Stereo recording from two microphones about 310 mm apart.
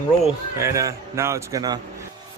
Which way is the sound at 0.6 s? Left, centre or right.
Centre.